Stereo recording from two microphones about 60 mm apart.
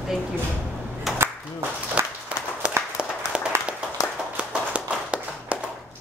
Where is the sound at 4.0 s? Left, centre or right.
Left.